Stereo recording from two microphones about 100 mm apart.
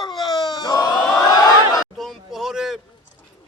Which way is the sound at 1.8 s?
5° right (ahead or behind).